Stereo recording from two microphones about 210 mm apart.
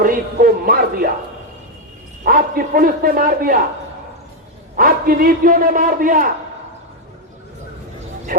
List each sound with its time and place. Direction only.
0.0 s music: 45° right (ahead or behind)
2.2 s speech: 40° right (ahead or behind)
4.8 s a man's voice: 45° right (ahead or behind)
8.3 s a man's voice: 40° right (ahead or behind)